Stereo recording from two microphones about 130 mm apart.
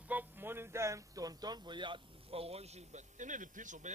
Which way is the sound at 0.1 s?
15° right (ahead or behind).